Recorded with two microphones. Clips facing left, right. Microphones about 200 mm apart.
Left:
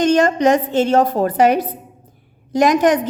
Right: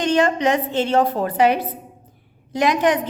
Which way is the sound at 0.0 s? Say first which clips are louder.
Left 4 dB; 45° left (ahead or behind).